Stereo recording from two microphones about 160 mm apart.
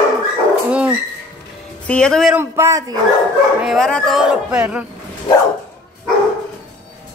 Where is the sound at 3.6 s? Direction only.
Centre (ahead or behind).